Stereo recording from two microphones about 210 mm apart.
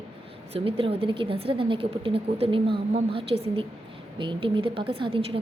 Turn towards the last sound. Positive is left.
turn(degrees=-25)  # may be behind; listen again after turning